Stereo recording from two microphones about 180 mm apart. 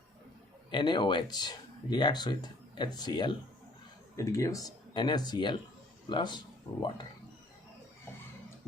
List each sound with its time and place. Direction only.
0.7 s speech: 25° left (ahead or behind)